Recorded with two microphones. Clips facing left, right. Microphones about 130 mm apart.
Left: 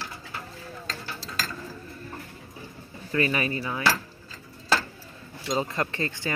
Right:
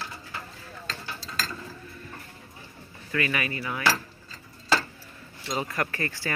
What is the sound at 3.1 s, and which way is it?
Speech, 30° left (ahead or behind).